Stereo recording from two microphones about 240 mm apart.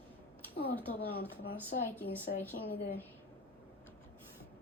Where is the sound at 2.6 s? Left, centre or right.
Left.